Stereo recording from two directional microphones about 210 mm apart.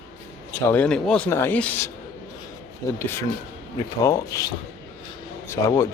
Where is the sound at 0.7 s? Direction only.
5° left (ahead or behind).